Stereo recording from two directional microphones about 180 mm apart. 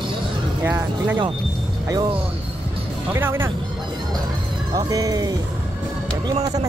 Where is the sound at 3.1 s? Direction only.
15° right (ahead or behind).